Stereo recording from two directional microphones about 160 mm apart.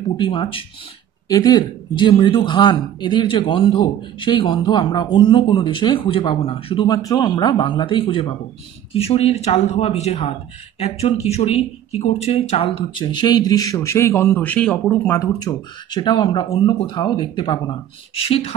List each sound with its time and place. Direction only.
0.2 s speech: 30° left (ahead or behind)
18.1 s speech: 40° left (ahead or behind)